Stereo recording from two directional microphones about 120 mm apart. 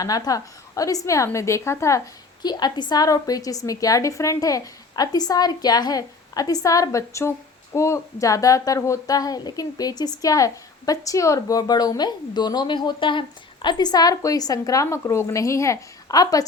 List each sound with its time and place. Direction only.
0.0 s a woman's voice: 30° left (ahead or behind)
2.4 s a woman's voice: 35° left (ahead or behind)